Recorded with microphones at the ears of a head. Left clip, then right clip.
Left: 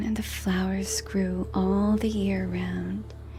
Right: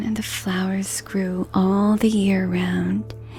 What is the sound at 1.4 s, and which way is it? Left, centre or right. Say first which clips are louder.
Speech: right 7 dB; right.